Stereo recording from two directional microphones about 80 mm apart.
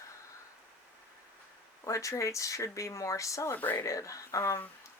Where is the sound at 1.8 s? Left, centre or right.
Left.